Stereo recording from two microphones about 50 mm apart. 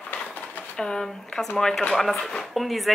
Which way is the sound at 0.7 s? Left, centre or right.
Centre.